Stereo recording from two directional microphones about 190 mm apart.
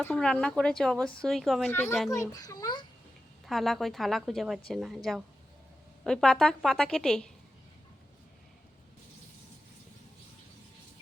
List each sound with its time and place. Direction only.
0.0 s speech: 5° left (ahead or behind)
2.1 s a child's voice: 15° left (ahead or behind)
3.4 s speech: centre (ahead or behind)
6.1 s speech: 5° left (ahead or behind)